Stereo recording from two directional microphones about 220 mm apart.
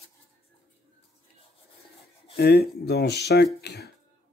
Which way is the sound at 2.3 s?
45° left (ahead or behind).